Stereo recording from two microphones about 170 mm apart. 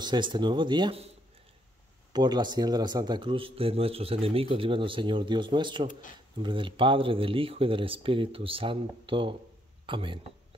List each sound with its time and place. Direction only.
0.0 s speech: 25° right (ahead or behind)
2.1 s speech: 25° right (ahead or behind)
5.9 s speech: 50° left (ahead or behind)
6.4 s speech: 30° right (ahead or behind)